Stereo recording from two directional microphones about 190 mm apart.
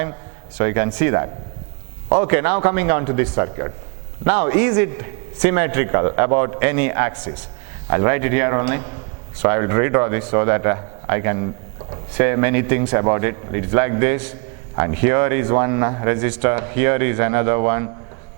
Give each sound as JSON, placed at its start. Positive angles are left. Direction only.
{"t": 0.5, "sound": "speech", "side_deg": -15}